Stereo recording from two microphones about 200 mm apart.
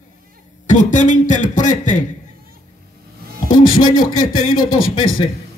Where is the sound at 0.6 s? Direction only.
40° left (ahead or behind).